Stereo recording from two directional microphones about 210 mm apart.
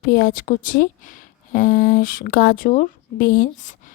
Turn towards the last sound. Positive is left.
turn(degrees=40)  # may be behind; listen again after turning